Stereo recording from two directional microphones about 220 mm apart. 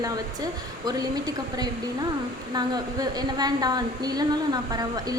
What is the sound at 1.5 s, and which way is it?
A woman's voice, 15° right (ahead or behind).